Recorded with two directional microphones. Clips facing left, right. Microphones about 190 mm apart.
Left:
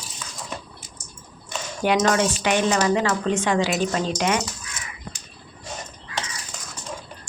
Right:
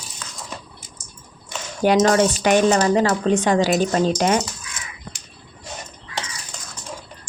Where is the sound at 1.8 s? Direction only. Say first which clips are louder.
Right 4 dB; 35° right (ahead or behind).